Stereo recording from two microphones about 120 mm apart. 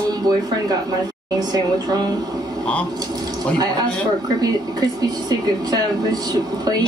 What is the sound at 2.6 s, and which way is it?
Speech, 10° left (ahead or behind).